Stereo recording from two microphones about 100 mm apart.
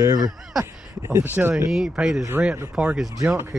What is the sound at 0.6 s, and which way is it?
Speech, 25° right (ahead or behind).